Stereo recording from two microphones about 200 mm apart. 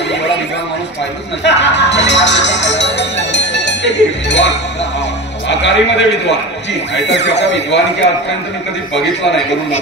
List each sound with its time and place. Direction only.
1.4 s music: 60° left (ahead or behind)
5.5 s a man's voice: 60° left (ahead or behind)
8.9 s a man's voice: 60° left (ahead or behind)